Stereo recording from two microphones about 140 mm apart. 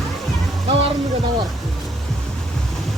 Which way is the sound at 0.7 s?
40° right (ahead or behind).